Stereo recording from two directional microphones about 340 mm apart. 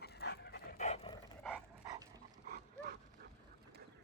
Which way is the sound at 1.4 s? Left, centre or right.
Centre.